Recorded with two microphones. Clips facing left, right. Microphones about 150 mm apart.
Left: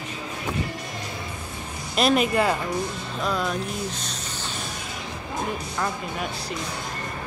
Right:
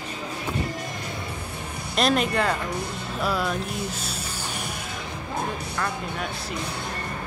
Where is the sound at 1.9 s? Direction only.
5° left (ahead or behind).